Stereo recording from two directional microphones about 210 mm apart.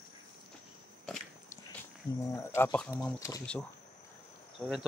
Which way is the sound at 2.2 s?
10° left (ahead or behind).